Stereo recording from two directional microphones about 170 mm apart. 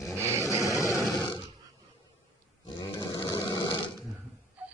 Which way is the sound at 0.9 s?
5° left (ahead or behind).